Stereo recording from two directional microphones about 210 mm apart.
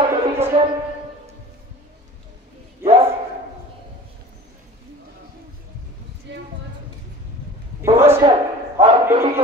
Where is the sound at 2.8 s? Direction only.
10° right (ahead or behind).